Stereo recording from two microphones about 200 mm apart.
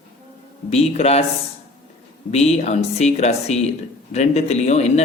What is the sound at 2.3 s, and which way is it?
Speech, 35° left (ahead or behind).